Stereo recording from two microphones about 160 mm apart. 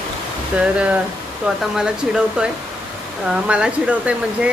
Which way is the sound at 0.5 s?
10° right (ahead or behind).